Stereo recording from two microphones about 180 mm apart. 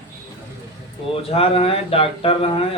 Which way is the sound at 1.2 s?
30° left (ahead or behind).